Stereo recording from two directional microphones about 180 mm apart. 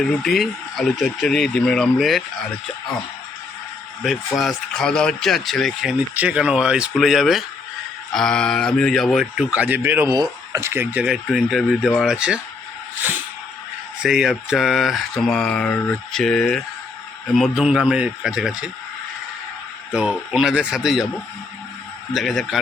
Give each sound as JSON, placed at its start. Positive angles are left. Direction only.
{"t": 0.0, "sound": "speech", "side_deg": 0}
{"t": 4.0, "sound": "speech", "side_deg": 0}
{"t": 14.0, "sound": "speech", "side_deg": -5}
{"t": 19.9, "sound": "speech", "side_deg": -5}
{"t": 22.1, "sound": "speech", "side_deg": 0}